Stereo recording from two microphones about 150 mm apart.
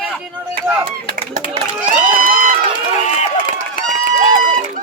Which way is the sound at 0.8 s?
65° right (ahead or behind).